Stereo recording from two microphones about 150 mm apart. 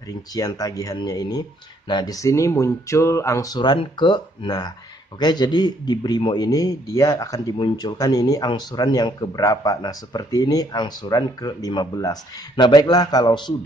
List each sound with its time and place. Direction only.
0.3 s a man's voice: 25° left (ahead or behind)